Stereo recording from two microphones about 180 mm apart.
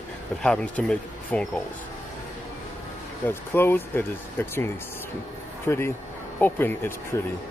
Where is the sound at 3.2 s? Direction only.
10° left (ahead or behind).